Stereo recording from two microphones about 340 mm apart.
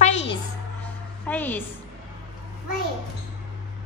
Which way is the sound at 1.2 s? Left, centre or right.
Centre.